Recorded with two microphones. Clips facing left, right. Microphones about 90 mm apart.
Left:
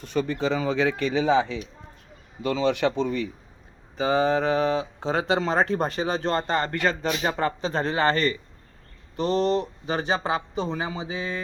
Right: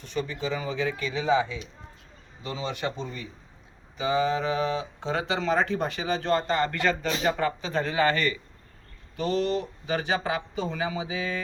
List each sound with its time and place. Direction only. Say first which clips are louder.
0.0 s speech: left 5 dB; 55° left (ahead or behind)
2.4 s speech: left 9 dB; 75° left (ahead or behind)
3.9 s speech: left 3 dB; 40° left (ahead or behind)